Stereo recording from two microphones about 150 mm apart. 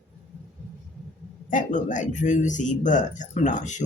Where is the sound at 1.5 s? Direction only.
60° left (ahead or behind).